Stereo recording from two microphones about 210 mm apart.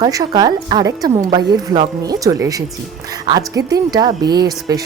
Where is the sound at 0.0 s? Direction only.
20° right (ahead or behind).